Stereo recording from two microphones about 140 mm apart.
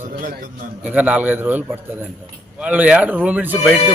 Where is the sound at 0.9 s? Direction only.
10° right (ahead or behind).